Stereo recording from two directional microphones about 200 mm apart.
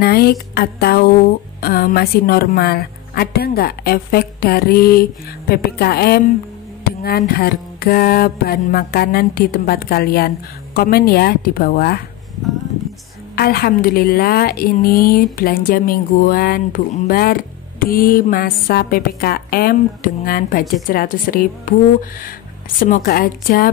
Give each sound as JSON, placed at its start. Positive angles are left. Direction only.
{"t": 0.0, "sound": "music", "side_deg": 50}
{"t": 13.4, "sound": "music", "side_deg": 50}
{"t": 22.8, "sound": "music", "side_deg": 45}